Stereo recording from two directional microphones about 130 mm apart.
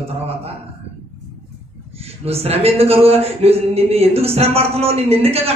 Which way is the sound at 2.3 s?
50° right (ahead or behind).